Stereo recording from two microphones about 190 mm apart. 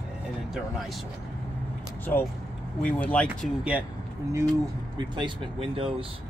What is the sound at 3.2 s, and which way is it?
Speech, 5° right (ahead or behind).